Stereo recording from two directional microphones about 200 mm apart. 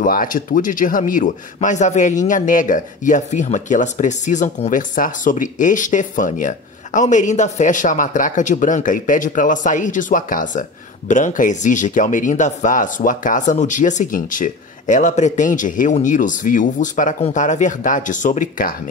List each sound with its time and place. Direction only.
0.0 s speech: 45° left (ahead or behind)